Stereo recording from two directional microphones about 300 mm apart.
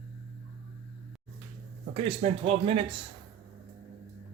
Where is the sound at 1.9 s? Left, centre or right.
Centre.